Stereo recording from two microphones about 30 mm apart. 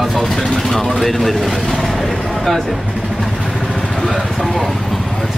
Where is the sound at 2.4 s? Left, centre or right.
Centre.